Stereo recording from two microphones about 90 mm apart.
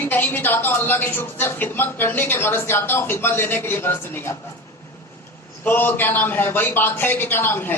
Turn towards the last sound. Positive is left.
turn(degrees=25)  # may be behind; listen again after turning